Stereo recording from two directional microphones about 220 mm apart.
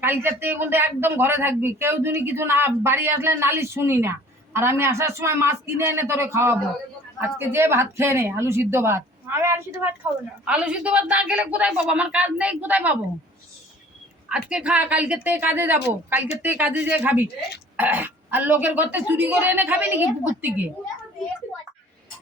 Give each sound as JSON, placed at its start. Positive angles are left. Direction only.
{"t": 0.0, "sound": "a man's voice", "side_deg": -10}
{"t": 14.3, "sound": "a man's voice", "side_deg": -5}